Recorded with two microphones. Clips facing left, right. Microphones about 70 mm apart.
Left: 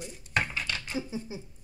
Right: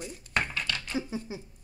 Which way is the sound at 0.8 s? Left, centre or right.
Right.